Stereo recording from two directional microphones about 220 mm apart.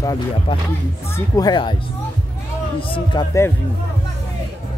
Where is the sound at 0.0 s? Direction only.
15° left (ahead or behind).